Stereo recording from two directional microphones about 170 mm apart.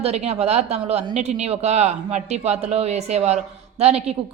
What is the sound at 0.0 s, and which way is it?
Speech, 40° right (ahead or behind).